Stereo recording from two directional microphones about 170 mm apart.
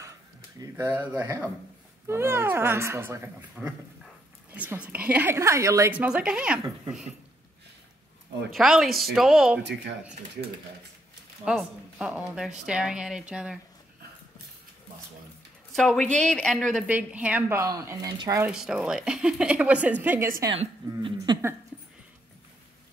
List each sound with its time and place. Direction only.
0.6 s speech: 15° right (ahead or behind)
4.5 s a sound: 10° right (ahead or behind)
4.8 s speech: 10° right (ahead or behind)
8.5 s speech: centre (ahead or behind)
9.6 s speech: 85° right
11.4 s speech: 5° right (ahead or behind)
15.7 s speech: 5° left (ahead or behind); by 18.4 s 25° right (ahead or behind)
18.4 s speech: 5° right (ahead or behind)
20.5 s speech: 30° right (ahead or behind)